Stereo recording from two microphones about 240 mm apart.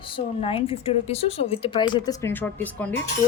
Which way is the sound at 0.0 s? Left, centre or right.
Left.